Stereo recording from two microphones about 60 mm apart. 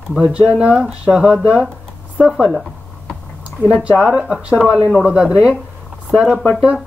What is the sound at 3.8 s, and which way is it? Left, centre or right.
Speech, centre.